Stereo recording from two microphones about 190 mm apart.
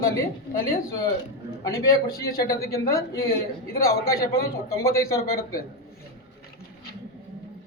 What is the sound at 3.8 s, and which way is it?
A man's voice, 15° left (ahead or behind).